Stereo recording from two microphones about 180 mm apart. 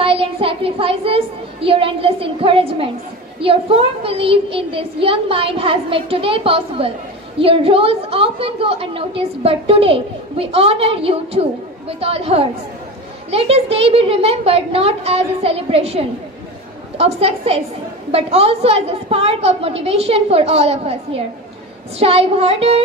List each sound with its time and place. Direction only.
0.0 s a child's voice: 30° right (ahead or behind)